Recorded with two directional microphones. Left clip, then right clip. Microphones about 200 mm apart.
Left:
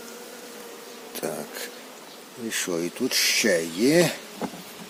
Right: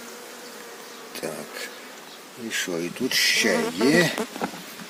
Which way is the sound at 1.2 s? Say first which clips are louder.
Left 1 dB; 10° left (ahead or behind).